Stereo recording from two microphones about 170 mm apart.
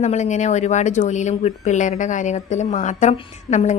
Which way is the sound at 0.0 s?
45° left (ahead or behind).